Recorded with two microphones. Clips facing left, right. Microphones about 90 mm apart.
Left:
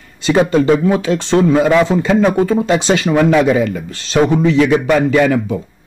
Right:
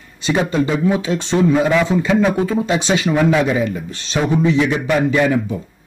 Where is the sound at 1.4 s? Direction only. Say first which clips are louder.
Left 2 dB; 60° left (ahead or behind).